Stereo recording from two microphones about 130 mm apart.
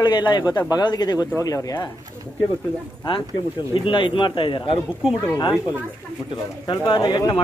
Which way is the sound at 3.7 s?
40° left (ahead or behind).